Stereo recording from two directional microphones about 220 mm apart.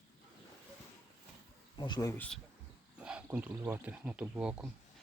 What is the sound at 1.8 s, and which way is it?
Speech, 15° left (ahead or behind).